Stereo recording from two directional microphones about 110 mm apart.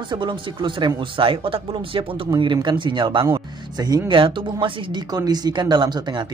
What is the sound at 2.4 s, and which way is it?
Speech, 45° right (ahead or behind).